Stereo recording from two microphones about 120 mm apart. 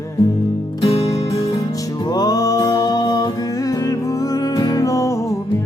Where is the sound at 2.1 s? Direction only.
30° left (ahead or behind).